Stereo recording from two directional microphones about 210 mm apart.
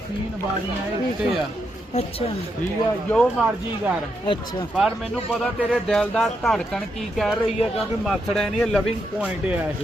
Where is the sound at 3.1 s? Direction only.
5° left (ahead or behind).